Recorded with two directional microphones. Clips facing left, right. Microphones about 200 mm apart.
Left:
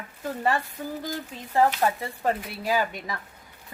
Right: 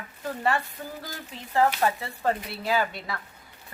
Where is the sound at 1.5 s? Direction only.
15° left (ahead or behind).